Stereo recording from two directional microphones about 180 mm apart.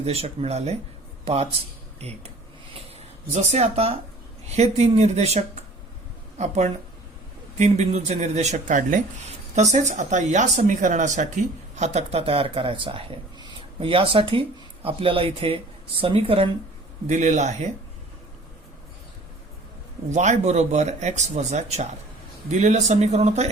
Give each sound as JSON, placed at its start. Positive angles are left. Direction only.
{"t": 0.0, "sound": "a man's voice", "side_deg": -35}
{"t": 3.3, "sound": "speech", "side_deg": -40}
{"t": 7.6, "sound": "speech", "side_deg": -40}
{"t": 17.1, "sound": "speech", "side_deg": -40}
{"t": 20.1, "sound": "speech", "side_deg": -40}